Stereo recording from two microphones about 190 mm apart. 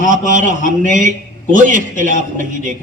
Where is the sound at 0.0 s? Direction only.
45° right (ahead or behind).